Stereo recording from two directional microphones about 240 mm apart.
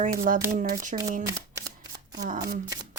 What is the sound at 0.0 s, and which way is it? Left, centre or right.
Speech, right.